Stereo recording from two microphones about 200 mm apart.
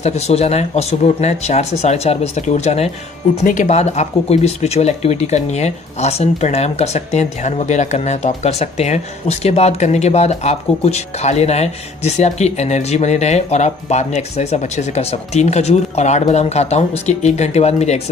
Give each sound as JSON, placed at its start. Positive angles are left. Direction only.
{"t": 0.0, "sound": "speech", "side_deg": 30}